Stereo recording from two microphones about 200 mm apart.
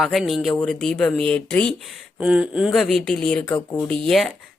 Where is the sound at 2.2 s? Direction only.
5° right (ahead or behind).